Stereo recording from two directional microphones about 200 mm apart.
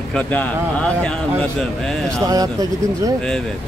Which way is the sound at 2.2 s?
20° right (ahead or behind).